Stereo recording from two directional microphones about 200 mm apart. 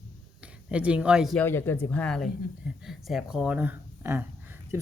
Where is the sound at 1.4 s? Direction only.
10° left (ahead or behind).